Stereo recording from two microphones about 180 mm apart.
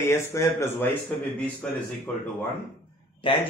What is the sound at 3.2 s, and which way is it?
Speech, 30° left (ahead or behind).